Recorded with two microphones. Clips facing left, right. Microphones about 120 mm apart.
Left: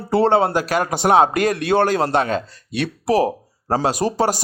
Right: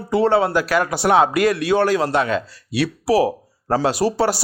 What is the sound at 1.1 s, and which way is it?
Speech, 45° left (ahead or behind).